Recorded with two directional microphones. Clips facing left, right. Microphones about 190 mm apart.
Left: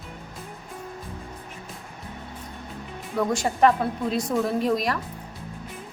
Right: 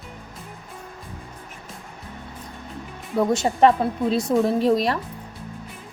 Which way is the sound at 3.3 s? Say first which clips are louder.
Right 3 dB; 25° right (ahead or behind).